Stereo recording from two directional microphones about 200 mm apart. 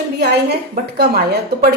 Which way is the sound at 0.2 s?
55° right (ahead or behind).